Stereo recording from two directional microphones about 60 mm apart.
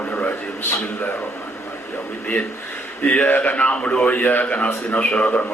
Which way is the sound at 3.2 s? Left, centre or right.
Left.